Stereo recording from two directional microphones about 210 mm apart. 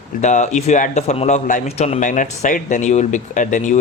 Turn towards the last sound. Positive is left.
turn(degrees=35)  # may be behind; listen again after turning